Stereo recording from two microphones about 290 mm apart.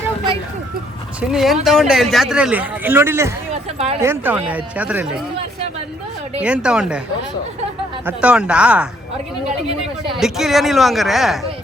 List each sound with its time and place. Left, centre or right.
1.3 s a man's voice: centre
3.5 s a sound: right
4.0 s a man's voice: centre
6.4 s a man's voice: centre
8.0 s a man's voice: centre
10.2 s a man's voice: centre